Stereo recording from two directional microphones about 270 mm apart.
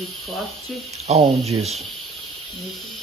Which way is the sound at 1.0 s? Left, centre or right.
Right.